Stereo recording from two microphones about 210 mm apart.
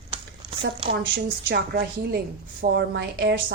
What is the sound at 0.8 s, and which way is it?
Speech, 25° right (ahead or behind).